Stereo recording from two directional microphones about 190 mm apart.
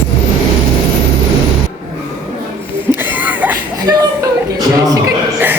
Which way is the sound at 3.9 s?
20° right (ahead or behind).